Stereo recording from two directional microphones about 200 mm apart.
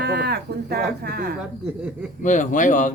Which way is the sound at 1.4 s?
5° right (ahead or behind).